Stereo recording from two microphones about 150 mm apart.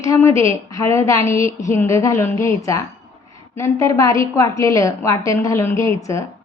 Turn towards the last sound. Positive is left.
turn(degrees=20)  # may be behind; listen again after turning